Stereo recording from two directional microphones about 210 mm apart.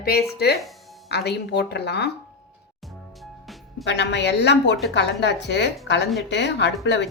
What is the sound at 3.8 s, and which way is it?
A woman's voice, 55° left (ahead or behind).